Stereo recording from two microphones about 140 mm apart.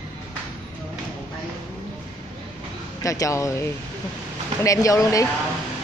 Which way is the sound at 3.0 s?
25° left (ahead or behind).